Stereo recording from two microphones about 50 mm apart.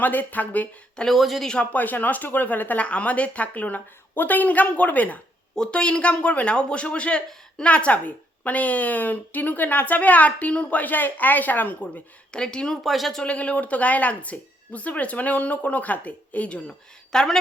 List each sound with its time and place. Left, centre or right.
0.0 s speech: left
1.0 s speech: centre
1.7 s speech: left
5.5 s speech: left
12.3 s speech: centre
12.8 s speech: centre
13.2 s speech: left
16.6 s speech: centre